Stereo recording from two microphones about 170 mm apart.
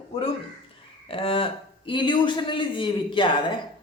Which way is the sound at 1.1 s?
30° left (ahead or behind).